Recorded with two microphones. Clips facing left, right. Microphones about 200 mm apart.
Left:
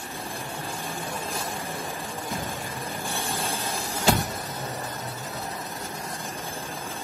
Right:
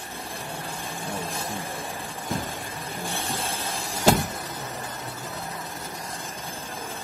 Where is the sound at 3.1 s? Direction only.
50° left (ahead or behind).